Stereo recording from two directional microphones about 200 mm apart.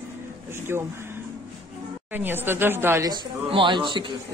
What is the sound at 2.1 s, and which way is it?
Speech, 10° right (ahead or behind).